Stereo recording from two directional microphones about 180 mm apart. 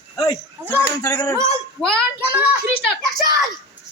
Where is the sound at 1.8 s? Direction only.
5° left (ahead or behind).